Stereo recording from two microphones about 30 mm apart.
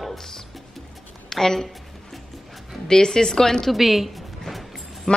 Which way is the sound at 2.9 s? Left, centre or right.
Left.